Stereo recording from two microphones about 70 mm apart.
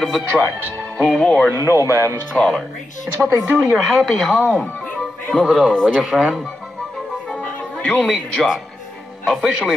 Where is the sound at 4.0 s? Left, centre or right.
Centre.